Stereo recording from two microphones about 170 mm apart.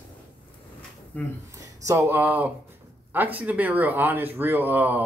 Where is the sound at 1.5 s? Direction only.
20° right (ahead or behind).